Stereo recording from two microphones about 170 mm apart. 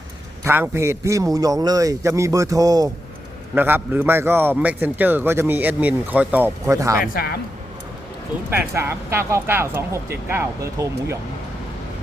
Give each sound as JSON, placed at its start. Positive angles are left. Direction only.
{"t": 0.4, "sound": "a man's voice", "side_deg": -15}
{"t": 7.0, "sound": "speech", "side_deg": 60}
{"t": 8.4, "sound": "a man's voice", "side_deg": -15}